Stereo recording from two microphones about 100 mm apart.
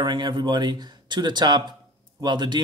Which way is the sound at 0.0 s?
50° right (ahead or behind).